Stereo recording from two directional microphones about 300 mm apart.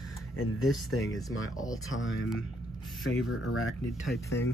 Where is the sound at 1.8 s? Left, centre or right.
Left.